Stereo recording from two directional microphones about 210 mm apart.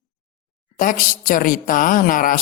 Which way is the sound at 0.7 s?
40° left (ahead or behind).